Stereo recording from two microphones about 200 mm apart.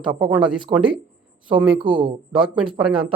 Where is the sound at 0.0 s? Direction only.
25° right (ahead or behind).